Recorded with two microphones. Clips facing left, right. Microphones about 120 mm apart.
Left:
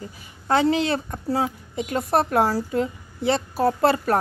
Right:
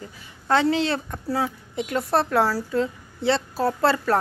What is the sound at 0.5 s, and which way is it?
A woman's voice, 15° left (ahead or behind).